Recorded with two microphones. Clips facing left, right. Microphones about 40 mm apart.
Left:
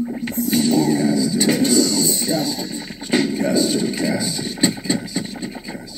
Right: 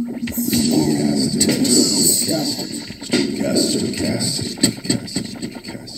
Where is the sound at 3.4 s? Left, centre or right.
Left.